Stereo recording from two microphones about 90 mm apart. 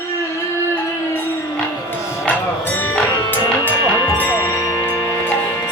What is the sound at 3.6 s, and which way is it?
Music, 20° left (ahead or behind).